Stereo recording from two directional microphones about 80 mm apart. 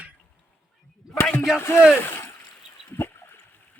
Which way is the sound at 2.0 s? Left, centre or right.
Left.